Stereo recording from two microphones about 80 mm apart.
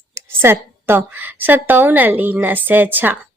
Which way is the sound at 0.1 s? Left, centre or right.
Right.